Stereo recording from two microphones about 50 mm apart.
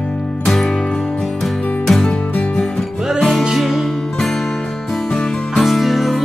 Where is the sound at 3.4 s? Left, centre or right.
Centre.